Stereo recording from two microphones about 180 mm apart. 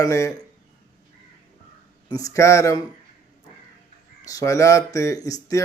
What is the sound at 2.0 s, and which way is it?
Speech, 20° left (ahead or behind).